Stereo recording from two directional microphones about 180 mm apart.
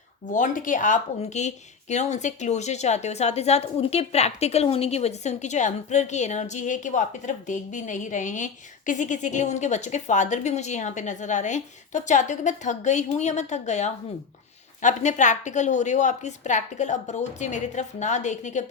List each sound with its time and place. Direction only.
0.3 s speech: 45° left (ahead or behind)